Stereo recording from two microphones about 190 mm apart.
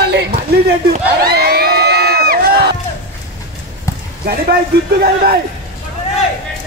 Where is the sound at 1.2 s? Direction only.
55° right (ahead or behind).